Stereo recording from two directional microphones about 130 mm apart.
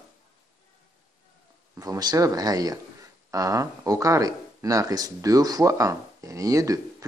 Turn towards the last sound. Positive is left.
turn(degrees=-25)  # may be behind; listen again after turning